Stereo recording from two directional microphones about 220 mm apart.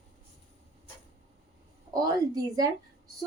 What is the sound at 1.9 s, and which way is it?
Speech, 15° right (ahead or behind).